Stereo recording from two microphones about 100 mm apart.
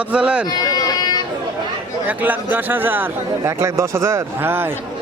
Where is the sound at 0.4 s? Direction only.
40° left (ahead or behind).